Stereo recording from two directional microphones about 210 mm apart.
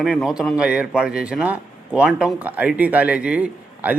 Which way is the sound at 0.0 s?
Centre (ahead or behind).